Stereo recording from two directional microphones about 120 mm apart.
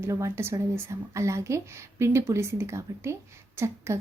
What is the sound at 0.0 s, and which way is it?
A woman's voice, 20° right (ahead or behind).